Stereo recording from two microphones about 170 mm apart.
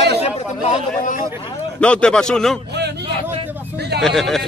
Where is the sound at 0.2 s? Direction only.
45° left (ahead or behind).